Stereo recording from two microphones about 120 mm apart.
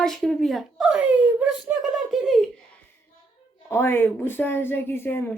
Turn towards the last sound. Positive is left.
turn(degrees=15)  # may be behind; listen again after turning